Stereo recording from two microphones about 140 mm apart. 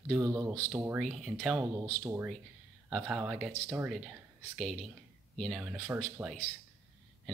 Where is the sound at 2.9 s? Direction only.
Centre (ahead or behind).